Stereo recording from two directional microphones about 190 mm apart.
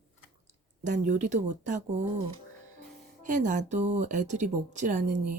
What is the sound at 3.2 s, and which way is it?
Speech, 40° right (ahead or behind).